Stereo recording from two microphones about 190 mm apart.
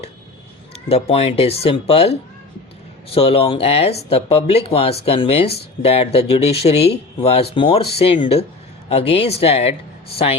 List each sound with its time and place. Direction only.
0.9 s speech: 30° left (ahead or behind)